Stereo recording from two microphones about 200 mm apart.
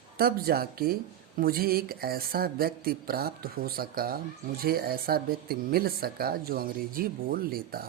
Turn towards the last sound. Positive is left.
turn(degrees=-50)  # may be behind; listen again after turning